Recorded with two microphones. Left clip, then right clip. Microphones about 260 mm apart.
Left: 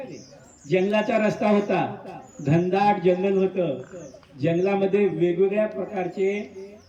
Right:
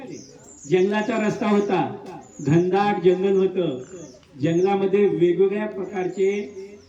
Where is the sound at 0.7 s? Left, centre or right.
Centre.